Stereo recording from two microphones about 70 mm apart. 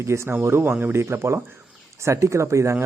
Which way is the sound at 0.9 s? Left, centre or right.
Right.